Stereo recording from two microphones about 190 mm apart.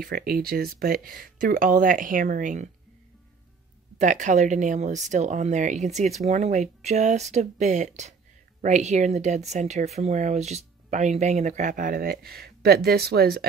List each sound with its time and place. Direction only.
0.0 s speech: 50° right (ahead or behind)
4.0 s speech: 40° right (ahead or behind)